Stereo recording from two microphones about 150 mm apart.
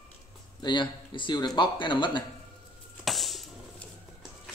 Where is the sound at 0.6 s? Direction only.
30° left (ahead or behind).